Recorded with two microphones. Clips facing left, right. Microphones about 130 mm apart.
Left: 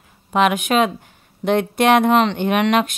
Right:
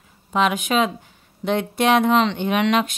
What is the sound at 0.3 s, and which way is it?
Speech, 60° left (ahead or behind).